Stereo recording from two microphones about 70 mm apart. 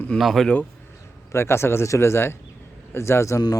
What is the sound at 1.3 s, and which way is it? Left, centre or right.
A man's voice, left.